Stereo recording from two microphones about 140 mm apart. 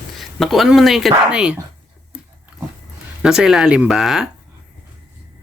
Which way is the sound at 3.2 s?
5° right (ahead or behind).